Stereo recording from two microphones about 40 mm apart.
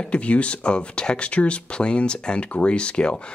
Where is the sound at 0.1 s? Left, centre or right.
Left.